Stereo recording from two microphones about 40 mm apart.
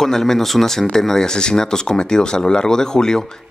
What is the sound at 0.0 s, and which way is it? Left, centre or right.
Speech, centre.